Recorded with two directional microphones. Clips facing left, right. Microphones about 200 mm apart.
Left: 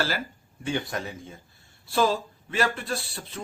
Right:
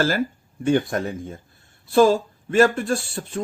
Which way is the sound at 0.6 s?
50° right (ahead or behind).